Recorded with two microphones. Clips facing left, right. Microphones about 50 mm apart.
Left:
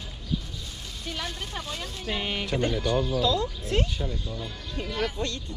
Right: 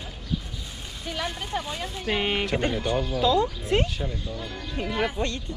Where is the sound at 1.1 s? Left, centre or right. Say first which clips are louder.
Right 5 dB; centre.